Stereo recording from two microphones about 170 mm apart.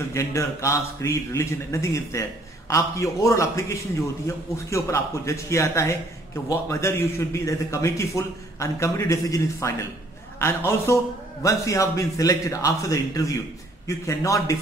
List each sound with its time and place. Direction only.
0.1 s a man's voice: 15° left (ahead or behind)